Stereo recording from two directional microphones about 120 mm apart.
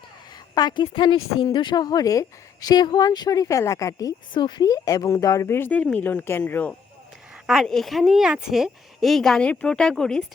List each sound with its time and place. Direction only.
0.5 s a woman's voice: 35° left (ahead or behind); by 6.7 s 10° left (ahead or behind)
7.4 s a woman's voice: centre (ahead or behind)